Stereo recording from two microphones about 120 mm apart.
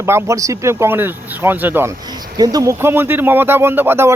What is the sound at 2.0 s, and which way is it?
Speech, 35° right (ahead or behind).